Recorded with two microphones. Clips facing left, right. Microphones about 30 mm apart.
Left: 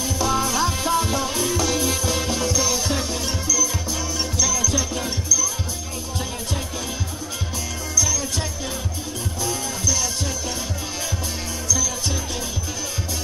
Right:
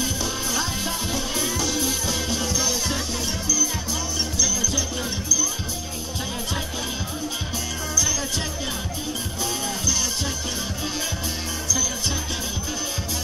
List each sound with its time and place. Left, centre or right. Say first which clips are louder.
0.3 s music: left 5 dB; centre
7.9 s music: left 2 dB; centre